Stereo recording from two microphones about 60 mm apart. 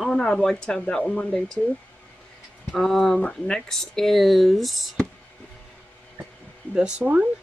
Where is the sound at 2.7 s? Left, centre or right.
Centre.